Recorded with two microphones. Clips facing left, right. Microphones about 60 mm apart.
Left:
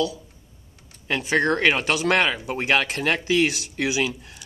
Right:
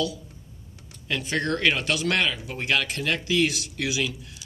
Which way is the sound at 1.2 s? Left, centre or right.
Left.